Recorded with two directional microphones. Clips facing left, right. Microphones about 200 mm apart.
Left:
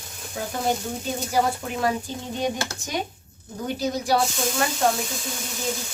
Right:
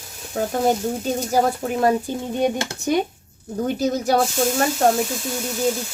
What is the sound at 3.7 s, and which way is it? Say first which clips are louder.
Speech: right 3 dB; 45° right (ahead or behind).